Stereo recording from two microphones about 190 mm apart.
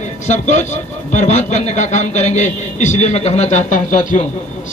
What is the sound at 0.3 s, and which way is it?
A man's voice, 40° left (ahead or behind).